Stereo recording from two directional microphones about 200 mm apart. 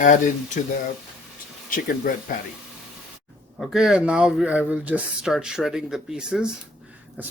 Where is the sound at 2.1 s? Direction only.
40° left (ahead or behind).